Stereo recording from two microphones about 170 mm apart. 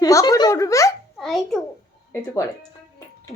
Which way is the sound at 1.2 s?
Centre (ahead or behind).